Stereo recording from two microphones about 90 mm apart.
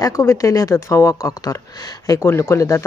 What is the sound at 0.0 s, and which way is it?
Speech, 35° left (ahead or behind).